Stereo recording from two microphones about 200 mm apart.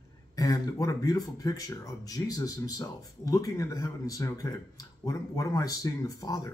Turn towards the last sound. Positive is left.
turn(degrees=15)  # may be behind; listen again after turning